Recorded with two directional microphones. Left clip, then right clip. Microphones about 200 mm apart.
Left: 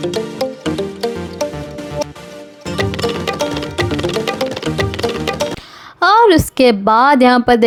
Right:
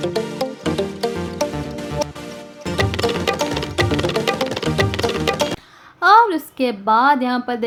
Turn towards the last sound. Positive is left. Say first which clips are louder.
# left 11 dB
turn(degrees=45)  # may be behind; listen again after turning